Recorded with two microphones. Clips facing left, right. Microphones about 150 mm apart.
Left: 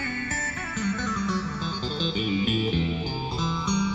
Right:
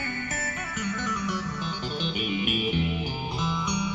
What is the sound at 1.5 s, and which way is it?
Music, 30° left (ahead or behind).